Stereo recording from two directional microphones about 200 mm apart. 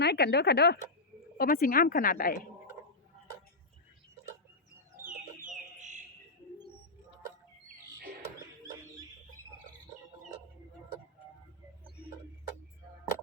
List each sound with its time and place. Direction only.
0.0 s a woman's voice: 55° left (ahead or behind)